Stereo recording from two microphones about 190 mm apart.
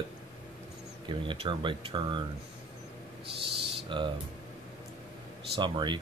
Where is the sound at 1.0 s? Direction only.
25° right (ahead or behind).